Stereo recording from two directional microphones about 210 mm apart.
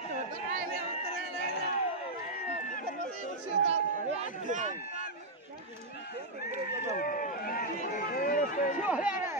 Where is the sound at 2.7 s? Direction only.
40° left (ahead or behind).